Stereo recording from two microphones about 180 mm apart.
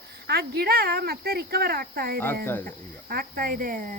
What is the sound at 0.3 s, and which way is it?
Speech, 65° right (ahead or behind).